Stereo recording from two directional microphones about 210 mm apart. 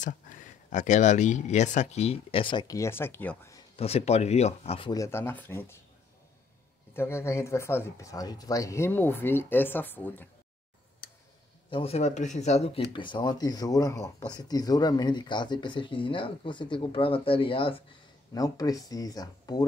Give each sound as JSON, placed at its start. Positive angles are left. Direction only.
{"t": 0.0, "sound": "speech", "side_deg": 35}
{"t": 3.7, "sound": "speech", "side_deg": 30}
{"t": 6.9, "sound": "speech", "side_deg": 10}
{"t": 11.7, "sound": "speech", "side_deg": 30}